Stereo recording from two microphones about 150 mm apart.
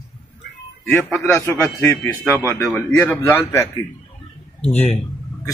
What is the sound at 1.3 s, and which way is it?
A man's voice, 15° left (ahead or behind).